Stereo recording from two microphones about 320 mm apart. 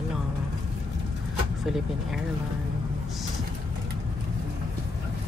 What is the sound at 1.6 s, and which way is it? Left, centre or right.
Speech, centre.